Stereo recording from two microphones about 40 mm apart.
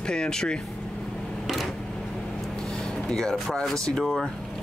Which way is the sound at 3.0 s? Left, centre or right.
Centre.